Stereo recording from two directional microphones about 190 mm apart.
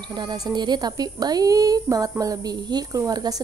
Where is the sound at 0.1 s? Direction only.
20° right (ahead or behind).